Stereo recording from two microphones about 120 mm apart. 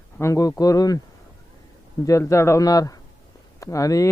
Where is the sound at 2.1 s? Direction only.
25° left (ahead or behind).